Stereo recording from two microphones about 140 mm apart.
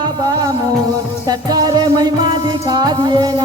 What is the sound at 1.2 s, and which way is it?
Music, 30° right (ahead or behind).